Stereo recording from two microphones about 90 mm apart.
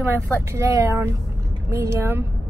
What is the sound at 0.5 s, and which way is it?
A woman's voice, 35° right (ahead or behind).